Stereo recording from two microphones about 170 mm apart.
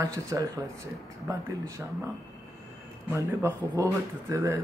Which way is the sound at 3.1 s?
20° right (ahead or behind).